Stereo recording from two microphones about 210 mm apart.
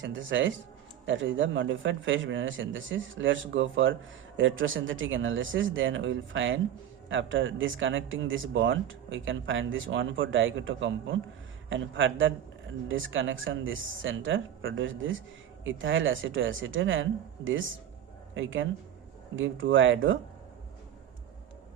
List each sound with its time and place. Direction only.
0.0 s speech: 65° right (ahead or behind)